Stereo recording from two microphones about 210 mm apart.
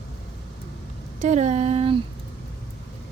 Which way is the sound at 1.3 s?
30° right (ahead or behind).